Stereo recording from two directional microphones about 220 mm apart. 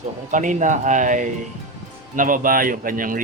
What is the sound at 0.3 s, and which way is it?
Speech, 35° right (ahead or behind).